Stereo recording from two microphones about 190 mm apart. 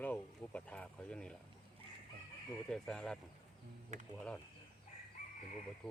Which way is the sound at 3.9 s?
40° right (ahead or behind).